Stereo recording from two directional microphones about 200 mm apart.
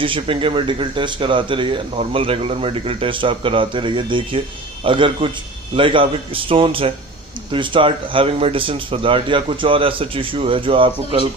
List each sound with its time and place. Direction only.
0.0 s speech: 25° right (ahead or behind)